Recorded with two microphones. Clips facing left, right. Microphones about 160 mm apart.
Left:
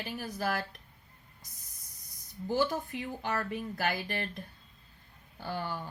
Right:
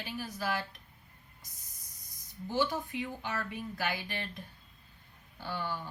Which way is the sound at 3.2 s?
50° left (ahead or behind).